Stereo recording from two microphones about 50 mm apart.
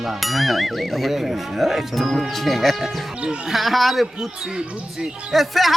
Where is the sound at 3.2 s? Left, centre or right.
Centre.